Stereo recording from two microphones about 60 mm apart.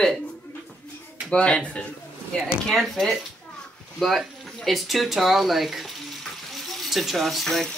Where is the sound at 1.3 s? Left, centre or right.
Centre.